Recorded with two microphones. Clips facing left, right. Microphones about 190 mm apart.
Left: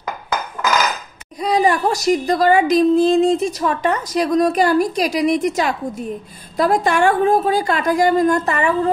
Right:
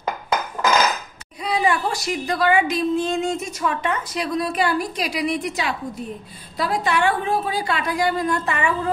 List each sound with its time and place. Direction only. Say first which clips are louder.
1.4 s a woman's voice: left 5 dB; 40° left (ahead or behind)